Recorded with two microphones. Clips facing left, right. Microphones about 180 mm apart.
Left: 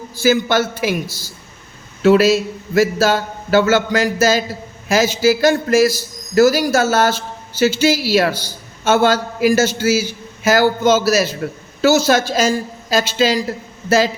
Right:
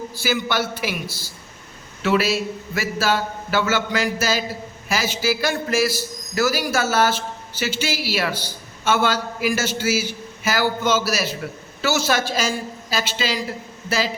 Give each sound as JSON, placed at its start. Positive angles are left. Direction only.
{"t": 0.2, "sound": "a man's voice", "side_deg": 45}